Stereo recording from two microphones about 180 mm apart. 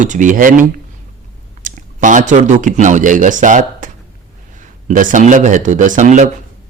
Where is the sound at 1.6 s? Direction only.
45° right (ahead or behind).